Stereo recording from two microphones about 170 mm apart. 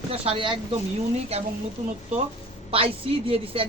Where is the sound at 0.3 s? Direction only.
30° right (ahead or behind).